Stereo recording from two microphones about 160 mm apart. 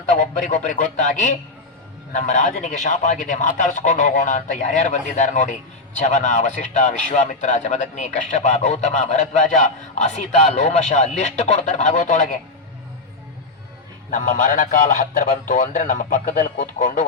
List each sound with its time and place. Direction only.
0.0 s a man's voice: 50° left (ahead or behind)
14.1 s a man's voice: 55° left (ahead or behind)